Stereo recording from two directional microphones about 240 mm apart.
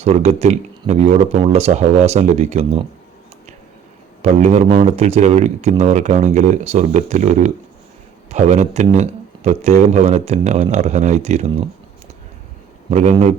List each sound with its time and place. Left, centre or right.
0.0 s speech: right
4.2 s speech: right
12.9 s speech: right